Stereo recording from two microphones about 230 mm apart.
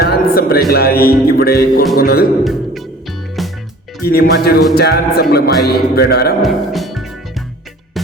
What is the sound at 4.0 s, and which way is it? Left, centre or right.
Speech, left.